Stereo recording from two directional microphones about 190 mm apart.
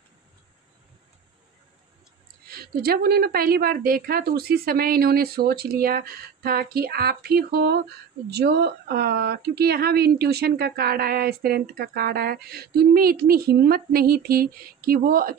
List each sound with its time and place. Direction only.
2.5 s a woman's voice: 55° right (ahead or behind)